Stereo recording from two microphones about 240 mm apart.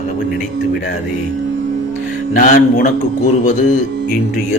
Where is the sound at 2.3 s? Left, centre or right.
Left.